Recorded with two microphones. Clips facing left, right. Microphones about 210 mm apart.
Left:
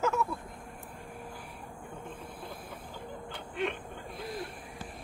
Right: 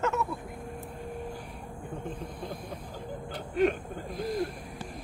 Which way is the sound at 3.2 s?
40° right (ahead or behind).